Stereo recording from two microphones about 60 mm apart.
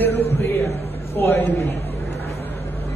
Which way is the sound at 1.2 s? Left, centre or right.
Left.